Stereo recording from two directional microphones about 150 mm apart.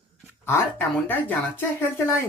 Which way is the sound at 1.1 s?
15° left (ahead or behind).